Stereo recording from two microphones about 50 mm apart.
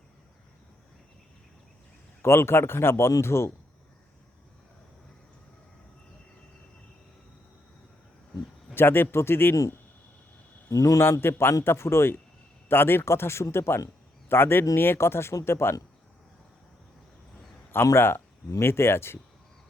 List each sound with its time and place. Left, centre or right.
2.2 s speech: left
8.7 s speech: left
10.7 s a man's voice: left
11.2 s speech: left
12.6 s speech: left
17.7 s speech: left